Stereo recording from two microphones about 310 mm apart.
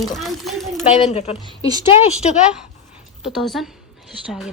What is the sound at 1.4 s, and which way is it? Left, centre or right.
Speech, centre.